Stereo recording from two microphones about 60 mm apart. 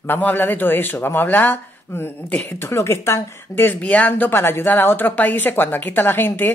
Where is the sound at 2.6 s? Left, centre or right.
Left.